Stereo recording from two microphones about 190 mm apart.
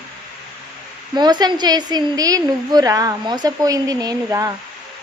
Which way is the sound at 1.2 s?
20° right (ahead or behind).